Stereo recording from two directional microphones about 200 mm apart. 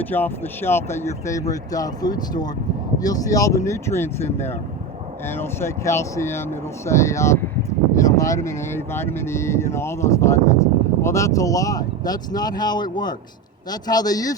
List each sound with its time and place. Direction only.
0.0 s a man's voice: 10° left (ahead or behind)